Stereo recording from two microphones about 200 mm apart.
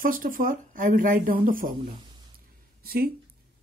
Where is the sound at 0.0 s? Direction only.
45° right (ahead or behind).